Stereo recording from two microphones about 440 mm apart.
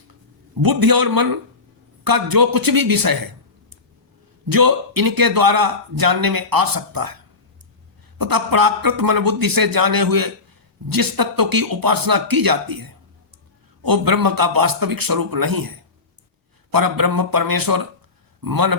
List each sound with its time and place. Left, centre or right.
0.6 s a man's voice: right
4.4 s a man's voice: right
8.2 s a man's voice: right